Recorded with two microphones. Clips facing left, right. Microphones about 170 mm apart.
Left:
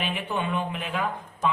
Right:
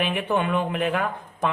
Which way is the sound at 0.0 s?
60° right (ahead or behind).